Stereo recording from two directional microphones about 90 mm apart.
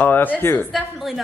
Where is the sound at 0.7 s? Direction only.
Centre (ahead or behind).